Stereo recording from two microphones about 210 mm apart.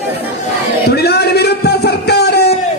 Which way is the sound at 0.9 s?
50° left (ahead or behind).